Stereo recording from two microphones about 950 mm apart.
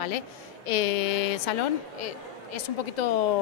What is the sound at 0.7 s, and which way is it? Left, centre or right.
A woman's voice, left.